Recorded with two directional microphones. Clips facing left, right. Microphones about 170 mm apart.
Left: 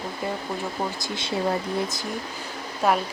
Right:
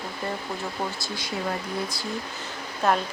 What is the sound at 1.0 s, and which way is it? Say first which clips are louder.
Speech: left 3 dB; 25° left (ahead or behind).